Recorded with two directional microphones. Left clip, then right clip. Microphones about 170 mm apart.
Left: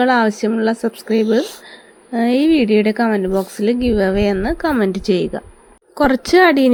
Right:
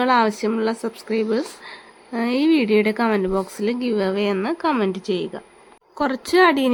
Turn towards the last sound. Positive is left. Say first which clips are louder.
# left 5 dB
turn(degrees=25)  # may be behind; listen again after turning